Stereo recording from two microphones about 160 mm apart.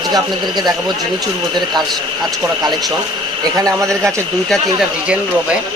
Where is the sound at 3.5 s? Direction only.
20° right (ahead or behind).